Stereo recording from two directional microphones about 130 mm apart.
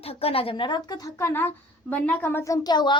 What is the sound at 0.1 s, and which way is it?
A woman's voice, 50° left (ahead or behind).